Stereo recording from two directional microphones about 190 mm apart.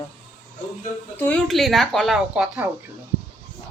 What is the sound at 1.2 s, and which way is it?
Speech, 5° left (ahead or behind).